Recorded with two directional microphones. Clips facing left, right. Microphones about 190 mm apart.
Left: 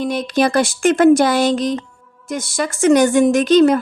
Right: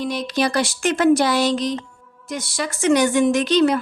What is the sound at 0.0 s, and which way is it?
A woman's voice, 50° left (ahead or behind).